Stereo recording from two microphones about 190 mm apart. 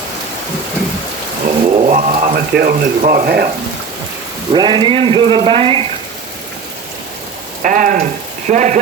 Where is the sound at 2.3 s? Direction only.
55° right (ahead or behind).